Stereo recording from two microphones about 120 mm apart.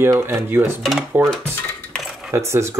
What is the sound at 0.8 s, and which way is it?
Speech, centre (ahead or behind).